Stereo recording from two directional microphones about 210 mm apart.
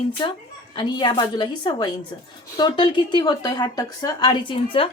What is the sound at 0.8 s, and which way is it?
Speech, 20° left (ahead or behind).